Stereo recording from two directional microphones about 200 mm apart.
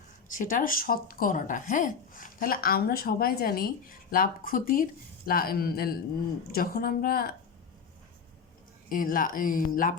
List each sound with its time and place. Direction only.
0.3 s speech: 40° left (ahead or behind)
8.9 s speech: 45° left (ahead or behind)